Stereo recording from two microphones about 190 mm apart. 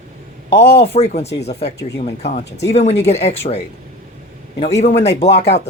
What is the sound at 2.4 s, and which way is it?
Speech, 70° left (ahead or behind).